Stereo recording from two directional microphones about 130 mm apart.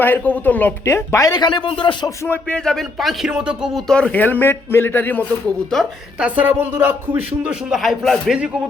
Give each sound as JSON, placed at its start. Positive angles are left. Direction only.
{"t": 0.0, "sound": "speech", "side_deg": 15}
{"t": 2.0, "sound": "speech", "side_deg": 15}
{"t": 6.1, "sound": "speech", "side_deg": -10}